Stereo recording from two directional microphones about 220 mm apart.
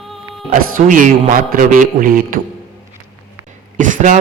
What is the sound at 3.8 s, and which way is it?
Speech, 35° right (ahead or behind).